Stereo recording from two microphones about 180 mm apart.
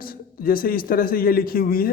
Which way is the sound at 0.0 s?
55° left (ahead or behind).